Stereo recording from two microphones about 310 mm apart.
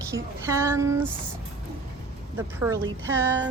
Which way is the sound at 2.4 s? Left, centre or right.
Centre.